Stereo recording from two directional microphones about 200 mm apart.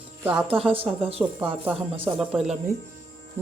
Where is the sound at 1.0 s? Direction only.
30° right (ahead or behind).